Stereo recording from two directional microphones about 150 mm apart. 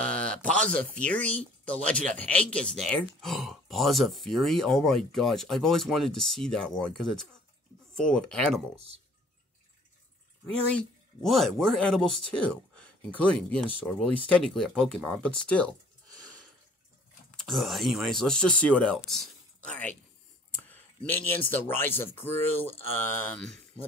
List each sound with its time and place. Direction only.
0.0 s a sound: 5° left (ahead or behind)
1.0 s speech: 10° left (ahead or behind)
8.7 s speech: 40° right (ahead or behind)
11.2 s speech: centre (ahead or behind)
17.4 s speech: centre (ahead or behind)